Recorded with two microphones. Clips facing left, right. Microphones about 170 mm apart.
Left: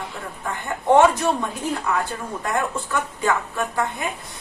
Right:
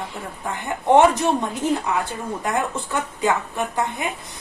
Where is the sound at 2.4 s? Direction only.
20° right (ahead or behind).